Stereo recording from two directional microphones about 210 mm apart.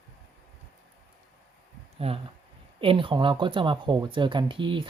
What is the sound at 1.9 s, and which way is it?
Speech, 30° right (ahead or behind).